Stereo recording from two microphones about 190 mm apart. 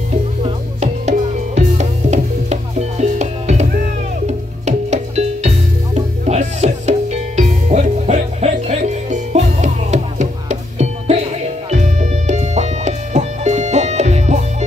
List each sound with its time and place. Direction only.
0.4 s music: 35° right (ahead or behind)